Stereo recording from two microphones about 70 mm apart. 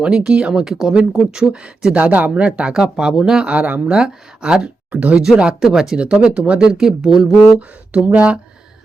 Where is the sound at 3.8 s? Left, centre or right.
Centre.